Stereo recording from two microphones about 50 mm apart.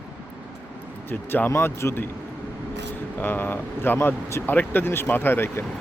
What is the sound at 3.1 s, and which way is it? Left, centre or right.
Speech, left.